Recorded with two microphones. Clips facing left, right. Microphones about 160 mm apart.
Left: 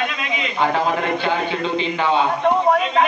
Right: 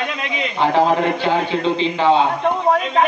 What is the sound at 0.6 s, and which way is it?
A man's voice, 30° right (ahead or behind).